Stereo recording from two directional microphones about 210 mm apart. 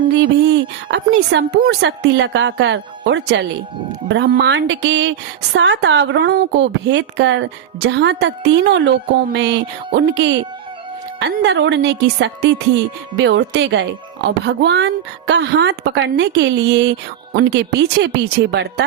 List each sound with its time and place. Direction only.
0.2 s speech: 55° right (ahead or behind)